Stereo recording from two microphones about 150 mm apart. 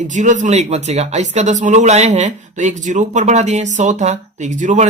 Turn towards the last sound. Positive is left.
turn(degrees=-55)  # may be behind; listen again after turning